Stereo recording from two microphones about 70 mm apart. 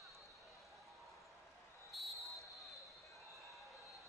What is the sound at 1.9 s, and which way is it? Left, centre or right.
Basketball bounce, centre.